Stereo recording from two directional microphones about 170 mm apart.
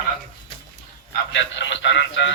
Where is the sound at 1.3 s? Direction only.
90° left.